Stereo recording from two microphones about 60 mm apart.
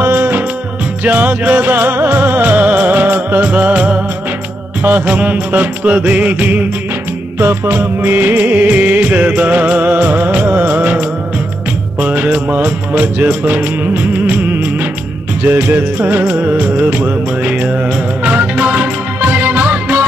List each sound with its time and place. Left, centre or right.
0.0 s music: right
7.3 s music: right